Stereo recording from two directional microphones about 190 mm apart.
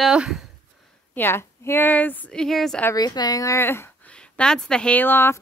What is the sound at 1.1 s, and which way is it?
A woman's voice, 10° left (ahead or behind).